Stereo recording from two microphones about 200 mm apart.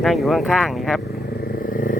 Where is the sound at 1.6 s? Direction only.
45° left (ahead or behind).